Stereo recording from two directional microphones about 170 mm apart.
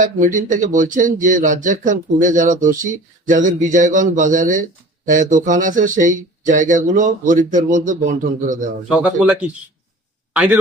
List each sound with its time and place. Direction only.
0.0 s speech: 50° right (ahead or behind)
8.9 s speech: 5° right (ahead or behind)